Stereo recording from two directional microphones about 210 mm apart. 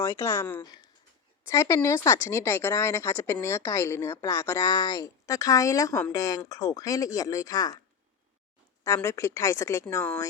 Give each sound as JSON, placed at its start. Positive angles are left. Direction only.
{"t": 0.0, "sound": "speech", "side_deg": 15}
{"t": 8.8, "sound": "speech", "side_deg": 15}